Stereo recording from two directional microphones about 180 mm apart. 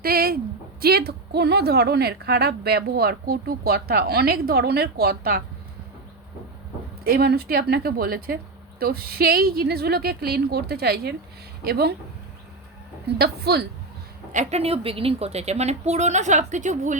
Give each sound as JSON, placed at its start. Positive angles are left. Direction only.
{"t": 0.0, "sound": "a sound", "side_deg": -55}
{"t": 0.8, "sound": "a woman's voice", "side_deg": -60}
{"t": 7.0, "sound": "a woman's voice", "side_deg": -60}
{"t": 13.1, "sound": "a woman's voice", "side_deg": -60}
{"t": 14.3, "sound": "a woman's voice", "side_deg": -35}